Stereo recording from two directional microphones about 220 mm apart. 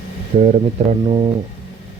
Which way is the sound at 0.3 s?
30° right (ahead or behind).